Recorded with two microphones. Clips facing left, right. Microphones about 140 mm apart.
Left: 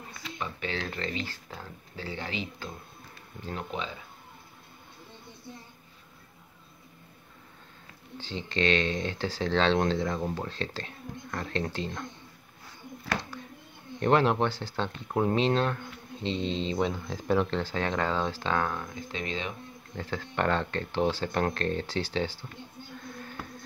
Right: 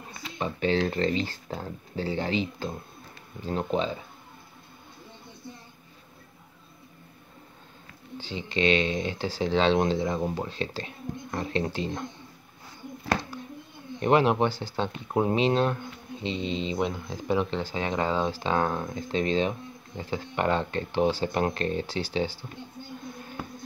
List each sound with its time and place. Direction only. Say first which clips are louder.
0.4 s speech: right 9 dB; 30° right (ahead or behind)
8.3 s speech: right 2 dB; 10° right (ahead or behind)
13.9 s speech: right 2 dB; 15° right (ahead or behind)
18.5 s speech: right 3 dB; 30° right (ahead or behind)
20.0 s speech: right 1 dB; 10° right (ahead or behind)